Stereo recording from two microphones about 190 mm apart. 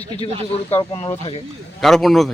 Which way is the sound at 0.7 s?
15° left (ahead or behind).